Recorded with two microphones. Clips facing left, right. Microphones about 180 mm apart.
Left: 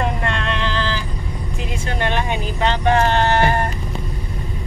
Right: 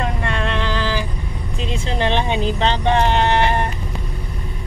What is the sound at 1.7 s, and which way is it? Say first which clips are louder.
Vehicle: right 3 dB; 25° right (ahead or behind).